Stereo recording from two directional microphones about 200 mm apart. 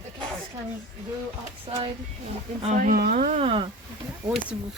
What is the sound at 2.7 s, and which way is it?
Speech, 45° right (ahead or behind).